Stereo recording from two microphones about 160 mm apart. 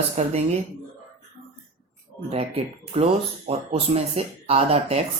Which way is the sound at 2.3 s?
40° right (ahead or behind).